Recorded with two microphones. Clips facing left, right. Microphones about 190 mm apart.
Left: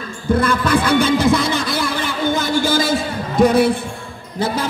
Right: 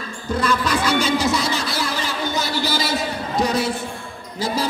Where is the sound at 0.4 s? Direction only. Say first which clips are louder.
Left 2 dB; 55° left (ahead or behind).